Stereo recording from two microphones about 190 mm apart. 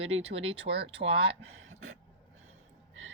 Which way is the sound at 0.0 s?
30° right (ahead or behind).